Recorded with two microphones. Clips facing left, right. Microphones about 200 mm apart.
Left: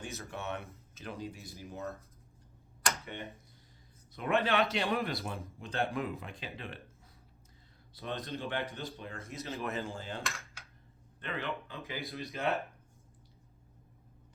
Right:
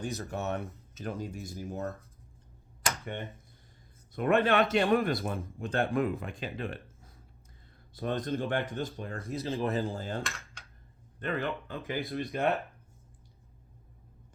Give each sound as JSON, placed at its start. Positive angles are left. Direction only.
{"t": 0.0, "sound": "speech", "side_deg": -35}
{"t": 4.1, "sound": "speech", "side_deg": -50}
{"t": 10.2, "sound": "computer keyboard", "side_deg": 0}
{"t": 11.2, "sound": "speech", "side_deg": -45}